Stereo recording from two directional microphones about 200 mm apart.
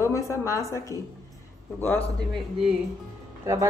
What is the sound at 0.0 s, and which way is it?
A woman's voice, 15° left (ahead or behind).